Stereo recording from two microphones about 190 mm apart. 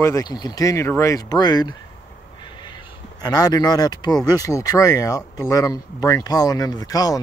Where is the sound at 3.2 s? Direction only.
20° left (ahead or behind).